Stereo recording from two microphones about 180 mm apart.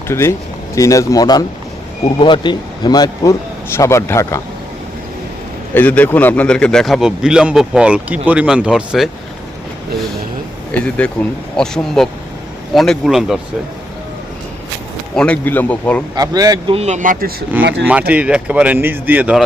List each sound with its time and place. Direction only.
0.1 s speech: 15° left (ahead or behind)
5.7 s speech: 10° left (ahead or behind)
10.7 s speech: 5° left (ahead or behind)
15.1 s speech: 5° left (ahead or behind)
16.1 s speech: 20° right (ahead or behind)
16.7 s speech: 40° right (ahead or behind)
18.1 s speech: 5° right (ahead or behind)